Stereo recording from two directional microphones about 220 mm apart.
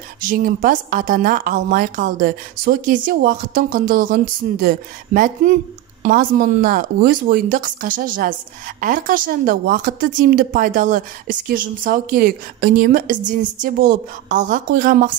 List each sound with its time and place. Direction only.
0.2 s a woman's voice: 40° right (ahead or behind)